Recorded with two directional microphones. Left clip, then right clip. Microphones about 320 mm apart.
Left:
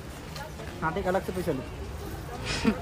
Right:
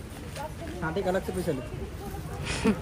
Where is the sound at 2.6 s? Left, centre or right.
Centre.